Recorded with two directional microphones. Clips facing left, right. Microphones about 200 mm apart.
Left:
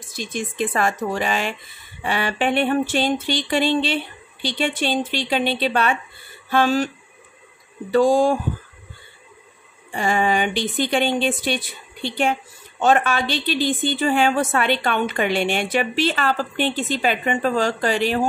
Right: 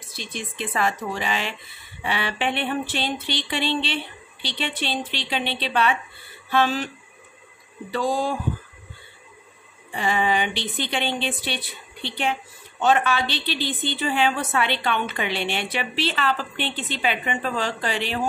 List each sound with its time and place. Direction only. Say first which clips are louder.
0.1 s a woman's voice: left 6 dB; 45° left (ahead or behind)
7.9 s a woman's voice: left 8 dB; 45° left (ahead or behind)
9.9 s a woman's voice: left 3 dB; 45° left (ahead or behind)